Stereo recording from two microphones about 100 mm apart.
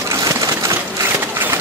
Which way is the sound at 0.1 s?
30° right (ahead or behind).